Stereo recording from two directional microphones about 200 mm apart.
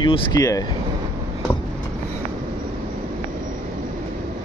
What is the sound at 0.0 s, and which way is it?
Speech, 20° left (ahead or behind).